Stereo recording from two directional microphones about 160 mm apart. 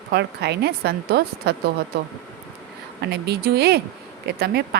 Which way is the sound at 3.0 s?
85° right.